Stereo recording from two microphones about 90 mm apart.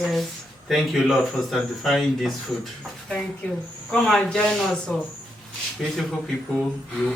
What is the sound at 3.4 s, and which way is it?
Speech, 15° left (ahead or behind).